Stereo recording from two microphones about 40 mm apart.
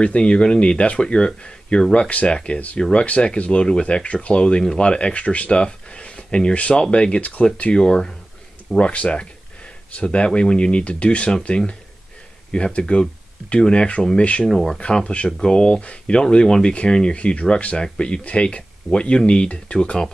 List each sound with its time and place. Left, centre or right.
0.0 s speech: left
2.0 s speech: left
2.3 s speech: left
7.2 s speech: left
7.7 s speech: centre
8.7 s speech: left
14.5 s speech: centre
14.8 s speech: left
15.2 s speech: centre
15.5 s speech: left